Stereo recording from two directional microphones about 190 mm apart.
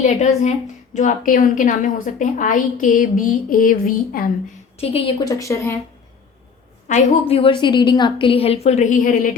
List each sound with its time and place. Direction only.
0.0 s a woman's voice: 35° left (ahead or behind)
4.8 s a woman's voice: 30° left (ahead or behind)
5.3 s speech: 15° left (ahead or behind)
6.8 s a woman's voice: 35° left (ahead or behind)